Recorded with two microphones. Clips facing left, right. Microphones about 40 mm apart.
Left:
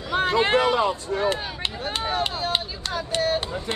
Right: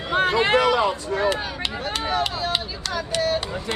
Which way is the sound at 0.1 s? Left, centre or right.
Right.